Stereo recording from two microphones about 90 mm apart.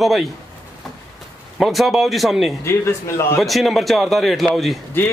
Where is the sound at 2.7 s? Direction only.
30° left (ahead or behind).